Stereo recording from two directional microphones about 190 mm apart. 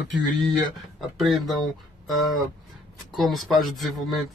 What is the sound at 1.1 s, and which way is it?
Speech, centre (ahead or behind).